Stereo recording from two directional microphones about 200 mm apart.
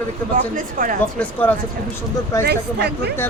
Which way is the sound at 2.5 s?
55° right (ahead or behind).